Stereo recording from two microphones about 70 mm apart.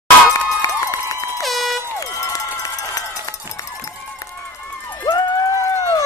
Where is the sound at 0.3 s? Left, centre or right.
Left.